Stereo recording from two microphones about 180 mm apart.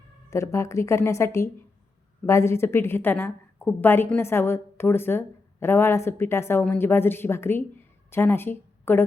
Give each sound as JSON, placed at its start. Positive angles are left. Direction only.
{"t": 0.3, "sound": "a woman's voice", "side_deg": 15}